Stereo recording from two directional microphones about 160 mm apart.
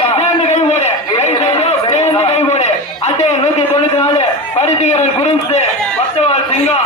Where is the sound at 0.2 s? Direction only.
45° left (ahead or behind).